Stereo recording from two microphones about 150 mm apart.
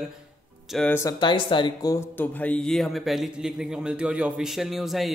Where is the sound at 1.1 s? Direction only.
30° left (ahead or behind).